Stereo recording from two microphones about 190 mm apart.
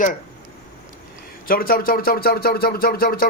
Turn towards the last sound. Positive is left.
turn(degrees=50)  # may be behind; listen again after turning